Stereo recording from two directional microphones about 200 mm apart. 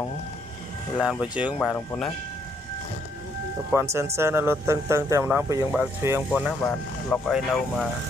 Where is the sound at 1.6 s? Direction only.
5° left (ahead or behind).